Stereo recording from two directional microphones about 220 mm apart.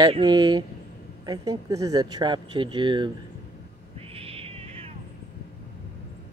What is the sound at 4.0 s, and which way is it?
Cat, 25° right (ahead or behind).